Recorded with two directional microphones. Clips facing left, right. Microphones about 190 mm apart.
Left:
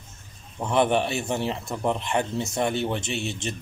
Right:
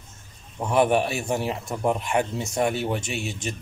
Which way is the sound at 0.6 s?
10° right (ahead or behind).